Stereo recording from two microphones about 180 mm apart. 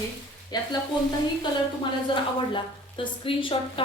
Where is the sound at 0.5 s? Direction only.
25° left (ahead or behind).